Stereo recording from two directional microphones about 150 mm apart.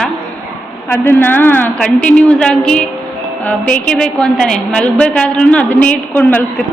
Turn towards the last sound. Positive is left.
turn(degrees=10)  # may be behind; listen again after turning